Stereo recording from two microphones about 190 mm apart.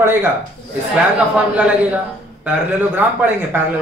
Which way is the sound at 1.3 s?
5° right (ahead or behind).